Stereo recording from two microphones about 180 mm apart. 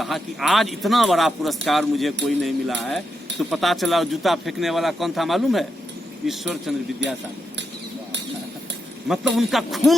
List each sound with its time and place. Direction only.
0.0 s speech: centre (ahead or behind)
7.0 s speech: 80° right
9.0 s speech: centre (ahead or behind)